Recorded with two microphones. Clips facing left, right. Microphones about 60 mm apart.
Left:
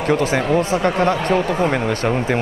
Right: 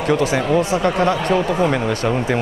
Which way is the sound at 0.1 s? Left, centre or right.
Left.